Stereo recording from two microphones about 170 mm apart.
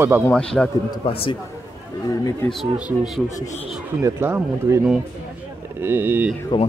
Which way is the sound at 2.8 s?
5° right (ahead or behind).